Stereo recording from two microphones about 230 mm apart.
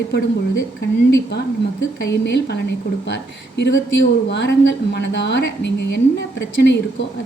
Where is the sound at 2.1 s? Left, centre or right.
Left.